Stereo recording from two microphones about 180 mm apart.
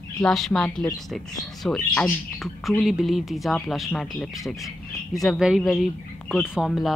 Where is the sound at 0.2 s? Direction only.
5° left (ahead or behind).